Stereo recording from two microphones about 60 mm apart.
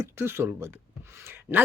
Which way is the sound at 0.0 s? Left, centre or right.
Right.